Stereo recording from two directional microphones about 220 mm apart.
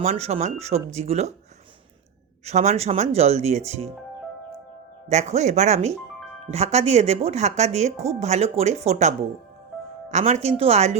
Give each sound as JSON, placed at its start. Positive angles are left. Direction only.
{"t": 0.0, "sound": "a woman's voice", "side_deg": -30}
{"t": 2.4, "sound": "a woman's voice", "side_deg": -30}
{"t": 5.0, "sound": "a woman's voice", "side_deg": -30}